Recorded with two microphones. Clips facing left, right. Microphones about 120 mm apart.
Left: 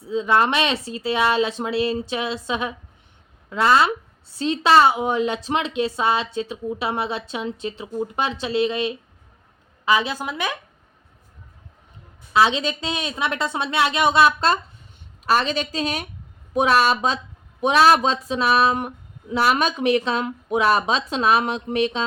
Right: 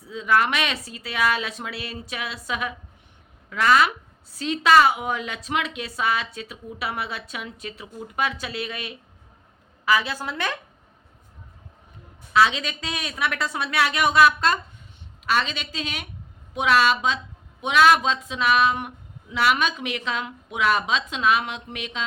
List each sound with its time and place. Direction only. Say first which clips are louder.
0.0 s a woman's voice: left 3 dB; 25° left (ahead or behind)
12.3 s a woman's voice: left 2 dB; 25° left (ahead or behind)
15.3 s speech: left 4 dB; 40° left (ahead or behind)